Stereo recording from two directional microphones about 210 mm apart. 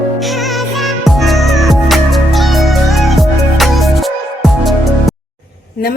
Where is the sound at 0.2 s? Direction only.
Centre (ahead or behind).